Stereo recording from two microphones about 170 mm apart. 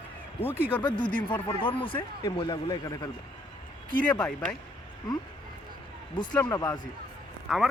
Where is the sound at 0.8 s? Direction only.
25° left (ahead or behind).